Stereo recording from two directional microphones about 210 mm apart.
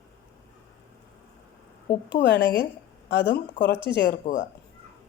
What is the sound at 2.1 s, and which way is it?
A woman's voice, 55° left (ahead or behind).